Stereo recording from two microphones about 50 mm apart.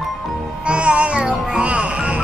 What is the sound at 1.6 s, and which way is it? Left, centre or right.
Music, right.